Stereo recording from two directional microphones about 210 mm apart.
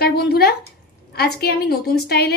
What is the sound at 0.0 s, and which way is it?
A woman's voice, 50° left (ahead or behind).